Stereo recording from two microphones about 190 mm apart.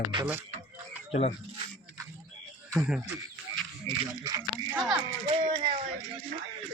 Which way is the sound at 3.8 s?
20° right (ahead or behind).